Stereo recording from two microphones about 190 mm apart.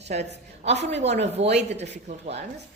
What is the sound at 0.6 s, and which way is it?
Speech, 65° right (ahead or behind).